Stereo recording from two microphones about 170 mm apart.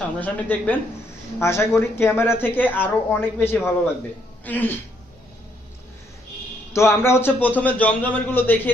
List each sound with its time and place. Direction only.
0.2 s a man's voice: 10° left (ahead or behind)
6.7 s a man's voice: 15° left (ahead or behind)